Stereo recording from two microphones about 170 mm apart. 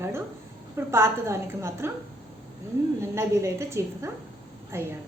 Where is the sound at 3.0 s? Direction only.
15° right (ahead or behind).